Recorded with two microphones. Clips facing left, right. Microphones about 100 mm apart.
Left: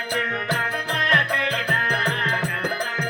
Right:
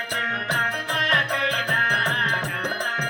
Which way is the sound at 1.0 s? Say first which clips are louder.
Left 2 dB; 40° right (ahead or behind).